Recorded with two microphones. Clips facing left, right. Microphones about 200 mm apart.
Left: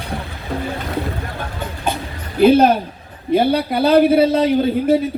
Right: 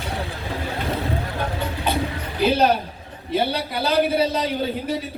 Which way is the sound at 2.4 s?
55° left (ahead or behind).